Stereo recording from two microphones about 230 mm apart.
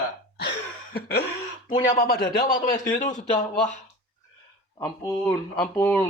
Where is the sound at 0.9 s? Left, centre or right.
Left.